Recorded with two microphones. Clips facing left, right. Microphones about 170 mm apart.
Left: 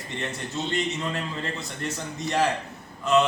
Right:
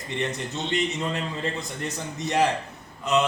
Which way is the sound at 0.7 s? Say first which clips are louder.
Right 3 dB; 20° right (ahead or behind).